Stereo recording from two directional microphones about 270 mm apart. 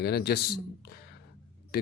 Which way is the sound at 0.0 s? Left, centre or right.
Left.